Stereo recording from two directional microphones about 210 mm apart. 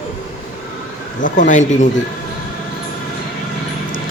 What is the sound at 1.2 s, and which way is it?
Speech, 35° left (ahead or behind).